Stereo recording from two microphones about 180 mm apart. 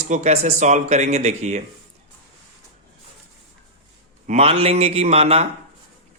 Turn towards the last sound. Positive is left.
turn(degrees=-35)  # may be behind; listen again after turning